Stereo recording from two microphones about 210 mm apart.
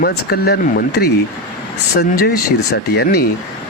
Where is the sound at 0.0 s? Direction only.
50° left (ahead or behind).